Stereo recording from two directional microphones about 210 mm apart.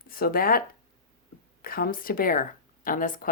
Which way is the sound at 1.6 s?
45° left (ahead or behind).